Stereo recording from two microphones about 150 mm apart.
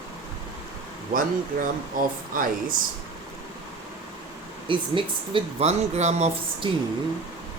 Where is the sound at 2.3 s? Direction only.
65° right (ahead or behind).